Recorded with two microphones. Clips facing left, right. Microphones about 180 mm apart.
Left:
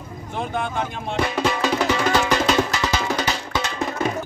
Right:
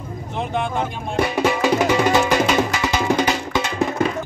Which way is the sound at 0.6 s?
5° right (ahead or behind).